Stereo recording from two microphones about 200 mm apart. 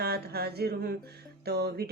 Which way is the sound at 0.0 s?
50° right (ahead or behind).